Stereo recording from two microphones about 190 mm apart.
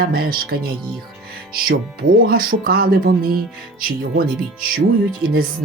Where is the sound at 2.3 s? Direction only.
50° right (ahead or behind).